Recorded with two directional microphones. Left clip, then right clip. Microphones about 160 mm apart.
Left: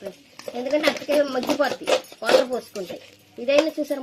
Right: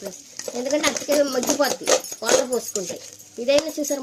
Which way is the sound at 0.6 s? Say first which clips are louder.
Left 1 dB; 60° right (ahead or behind).